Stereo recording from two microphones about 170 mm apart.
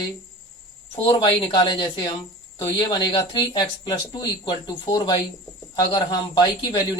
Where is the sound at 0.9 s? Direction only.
30° left (ahead or behind).